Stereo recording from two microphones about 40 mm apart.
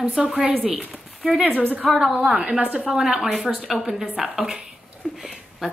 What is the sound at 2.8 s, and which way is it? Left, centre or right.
A woman's voice, centre.